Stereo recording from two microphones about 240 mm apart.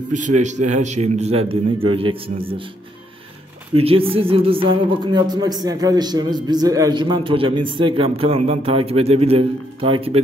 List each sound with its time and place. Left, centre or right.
0.4 s speech: right
3.7 s speech: right